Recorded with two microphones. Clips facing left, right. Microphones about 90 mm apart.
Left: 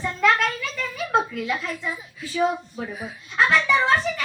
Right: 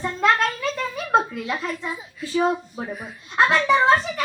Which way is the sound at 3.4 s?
35° right (ahead or behind).